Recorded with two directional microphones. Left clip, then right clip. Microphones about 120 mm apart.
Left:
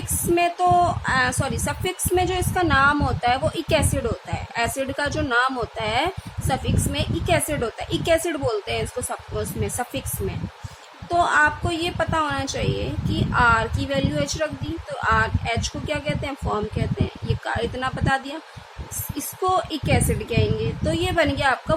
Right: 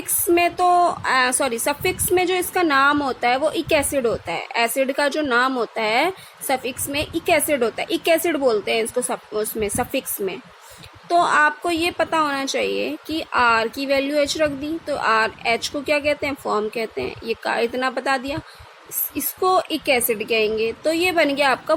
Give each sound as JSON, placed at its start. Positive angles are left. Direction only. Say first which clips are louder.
{"t": 0.3, "sound": "speech", "louder": "right 2 dB", "side_deg": -45}